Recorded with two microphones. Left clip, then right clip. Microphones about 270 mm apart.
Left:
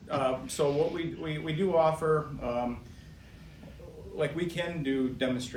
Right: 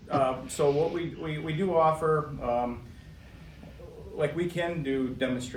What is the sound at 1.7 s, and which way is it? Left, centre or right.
Speech, centre.